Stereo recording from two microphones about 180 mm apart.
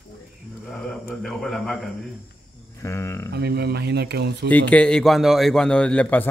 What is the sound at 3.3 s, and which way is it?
Speech, 65° right (ahead or behind).